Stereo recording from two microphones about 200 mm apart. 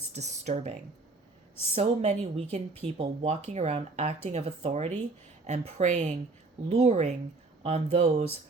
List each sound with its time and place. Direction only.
0.1 s speech: 35° right (ahead or behind)